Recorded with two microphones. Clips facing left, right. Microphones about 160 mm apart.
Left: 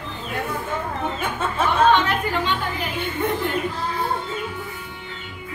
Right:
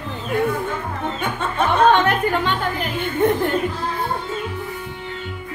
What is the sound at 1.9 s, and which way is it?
A woman's voice, 55° right (ahead or behind).